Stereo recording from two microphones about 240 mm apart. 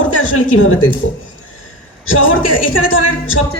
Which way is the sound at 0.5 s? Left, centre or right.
Left.